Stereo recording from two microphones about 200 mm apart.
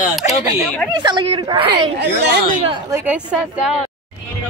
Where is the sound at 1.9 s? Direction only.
55° right (ahead or behind).